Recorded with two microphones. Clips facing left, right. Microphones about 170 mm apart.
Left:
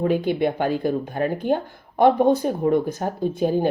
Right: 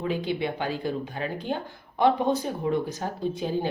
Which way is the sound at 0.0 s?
50° left (ahead or behind).